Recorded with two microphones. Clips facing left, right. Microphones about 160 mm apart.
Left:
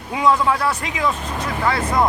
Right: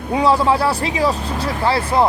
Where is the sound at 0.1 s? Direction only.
35° right (ahead or behind).